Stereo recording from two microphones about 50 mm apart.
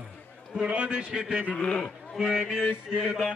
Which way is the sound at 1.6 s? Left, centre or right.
Left.